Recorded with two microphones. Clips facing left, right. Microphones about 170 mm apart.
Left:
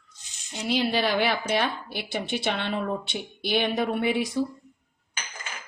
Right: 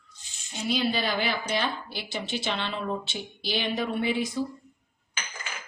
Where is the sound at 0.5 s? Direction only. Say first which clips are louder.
Left 2 dB; 70° left (ahead or behind).